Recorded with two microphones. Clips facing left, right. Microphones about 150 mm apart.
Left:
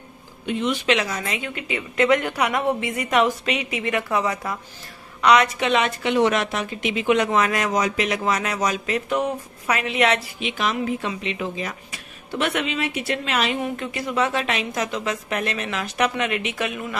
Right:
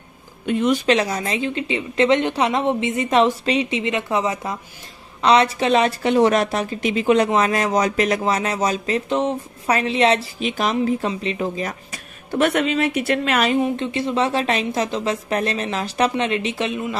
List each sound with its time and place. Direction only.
0.5 s speech: 50° right (ahead or behind)
0.8 s a woman's voice: 35° right (ahead or behind); by 13.5 s 55° right (ahead or behind)
13.6 s speech: 25° right (ahead or behind)